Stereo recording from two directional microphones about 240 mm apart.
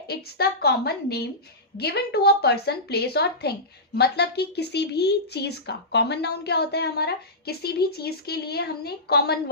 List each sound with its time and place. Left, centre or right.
0.1 s a woman's voice: left